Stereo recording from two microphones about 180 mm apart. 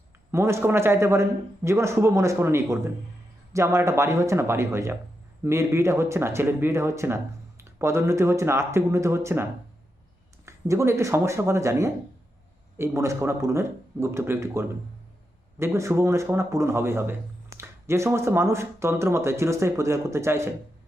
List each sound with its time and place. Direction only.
0.3 s a man's voice: 15° right (ahead or behind)